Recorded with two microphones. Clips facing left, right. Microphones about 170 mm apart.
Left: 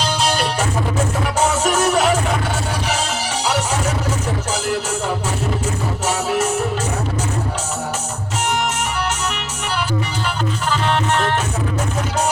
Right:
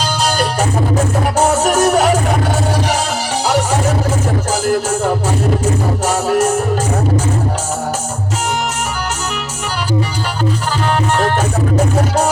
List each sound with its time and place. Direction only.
1.2 s music: 40° right (ahead or behind)
3.4 s music: 40° right (ahead or behind)
11.9 s music: 40° right (ahead or behind)